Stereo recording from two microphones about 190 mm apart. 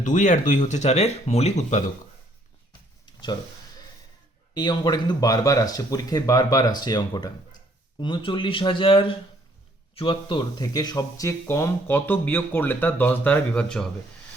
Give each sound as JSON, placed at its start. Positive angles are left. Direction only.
{"t": 0.0, "sound": "speech", "side_deg": 40}
{"t": 4.5, "sound": "speech", "side_deg": 20}